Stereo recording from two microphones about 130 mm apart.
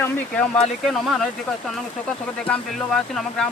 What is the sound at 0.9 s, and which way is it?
Speech, 5° left (ahead or behind).